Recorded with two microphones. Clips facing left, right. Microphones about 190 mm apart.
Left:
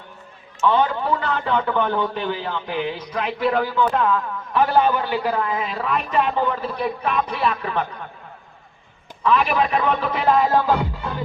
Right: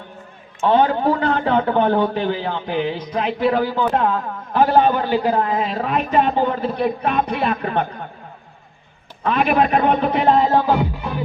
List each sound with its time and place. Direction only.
0.6 s a man's voice: 50° right (ahead or behind)
2.5 s music: 30° right (ahead or behind)
3.8 s a man's voice: 35° right (ahead or behind)
9.2 s a man's voice: 50° right (ahead or behind)
9.8 s music: 30° right (ahead or behind)